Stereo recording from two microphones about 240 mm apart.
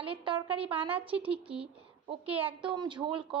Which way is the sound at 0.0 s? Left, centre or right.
Right.